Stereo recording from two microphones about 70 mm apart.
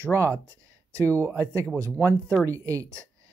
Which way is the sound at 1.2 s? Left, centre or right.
Right.